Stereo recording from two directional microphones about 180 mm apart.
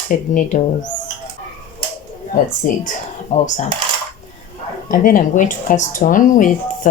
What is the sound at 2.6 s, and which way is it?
Speech, 45° left (ahead or behind).